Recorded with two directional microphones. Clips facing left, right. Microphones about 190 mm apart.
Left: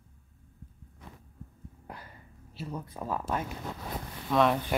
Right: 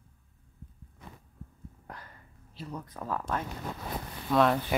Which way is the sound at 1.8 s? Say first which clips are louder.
Left 2 dB; 10° left (ahead or behind).